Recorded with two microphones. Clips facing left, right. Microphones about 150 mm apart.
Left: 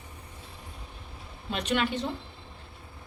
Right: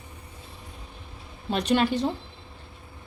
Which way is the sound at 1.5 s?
35° right (ahead or behind).